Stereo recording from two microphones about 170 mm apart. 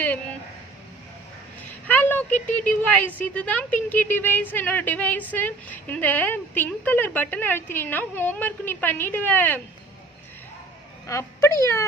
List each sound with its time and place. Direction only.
1.7 s a sound: 10° left (ahead or behind)
2.5 s speech: 10° left (ahead or behind)
11.1 s speech: 20° left (ahead or behind)